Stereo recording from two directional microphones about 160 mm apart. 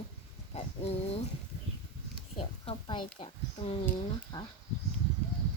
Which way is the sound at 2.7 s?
35° left (ahead or behind).